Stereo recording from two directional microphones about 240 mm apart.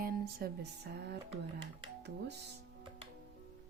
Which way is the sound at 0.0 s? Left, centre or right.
Right.